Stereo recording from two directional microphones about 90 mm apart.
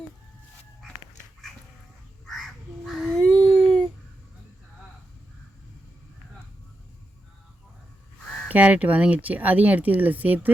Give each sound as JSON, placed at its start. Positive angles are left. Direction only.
{"t": 2.2, "sound": "crow", "side_deg": 5}
{"t": 3.2, "sound": "baby cry", "side_deg": 10}
{"t": 8.4, "sound": "speech", "side_deg": -15}